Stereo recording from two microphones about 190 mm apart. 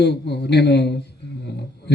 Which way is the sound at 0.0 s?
60° left (ahead or behind).